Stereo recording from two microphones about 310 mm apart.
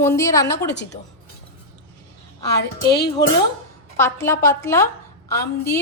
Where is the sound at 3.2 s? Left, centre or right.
Centre.